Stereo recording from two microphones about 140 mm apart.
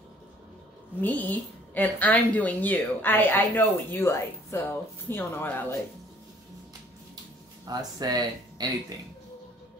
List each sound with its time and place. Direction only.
1.0 s a woman's voice: 10° left (ahead or behind)
7.6 s speech: 30° right (ahead or behind)